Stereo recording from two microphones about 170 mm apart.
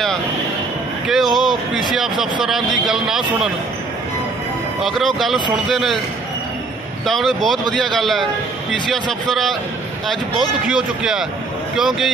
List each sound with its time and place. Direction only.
1.0 s a sound: centre (ahead or behind)
2.4 s speech: centre (ahead or behind)
4.8 s speech: centre (ahead or behind)
7.1 s speech: centre (ahead or behind)